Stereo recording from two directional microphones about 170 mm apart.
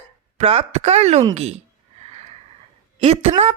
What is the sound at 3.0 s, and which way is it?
Speech, 40° right (ahead or behind).